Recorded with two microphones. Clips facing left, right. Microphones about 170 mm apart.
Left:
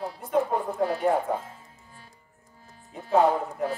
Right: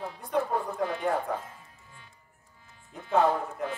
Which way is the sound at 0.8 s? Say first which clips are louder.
Left 8 dB; 35° left (ahead or behind).